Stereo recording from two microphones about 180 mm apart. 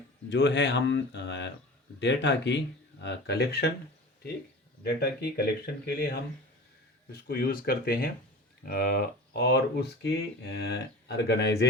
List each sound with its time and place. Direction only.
0.3 s speech: 75° left (ahead or behind)
4.8 s speech: 60° left (ahead or behind)